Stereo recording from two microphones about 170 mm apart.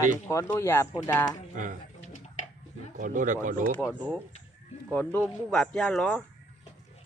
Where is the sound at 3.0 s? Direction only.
50° right (ahead or behind).